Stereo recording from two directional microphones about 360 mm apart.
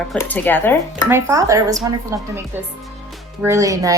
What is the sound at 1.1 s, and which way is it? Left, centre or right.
Speech, centre.